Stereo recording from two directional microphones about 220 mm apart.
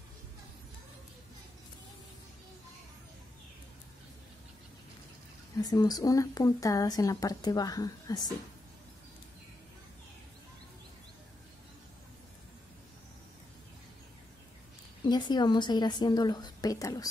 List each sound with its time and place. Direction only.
5.6 s a woman's voice: 15° left (ahead or behind)
15.0 s a woman's voice: 20° left (ahead or behind)